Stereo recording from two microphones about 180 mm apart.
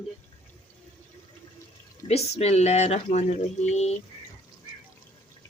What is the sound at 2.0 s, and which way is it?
Speech, 35° left (ahead or behind).